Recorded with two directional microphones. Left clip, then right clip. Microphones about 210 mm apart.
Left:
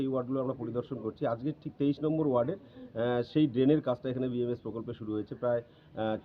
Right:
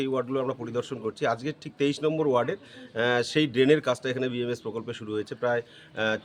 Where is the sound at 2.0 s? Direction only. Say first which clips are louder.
Right 4 dB; 45° right (ahead or behind).